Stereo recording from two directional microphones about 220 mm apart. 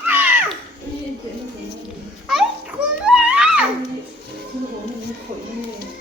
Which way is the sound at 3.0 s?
5° right (ahead or behind).